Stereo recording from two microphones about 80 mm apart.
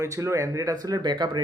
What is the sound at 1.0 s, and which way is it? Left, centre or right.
Speech, right.